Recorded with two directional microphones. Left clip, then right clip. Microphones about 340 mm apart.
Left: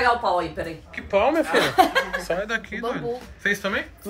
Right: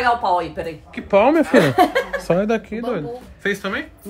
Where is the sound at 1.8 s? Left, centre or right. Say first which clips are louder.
Right 2 dB; centre.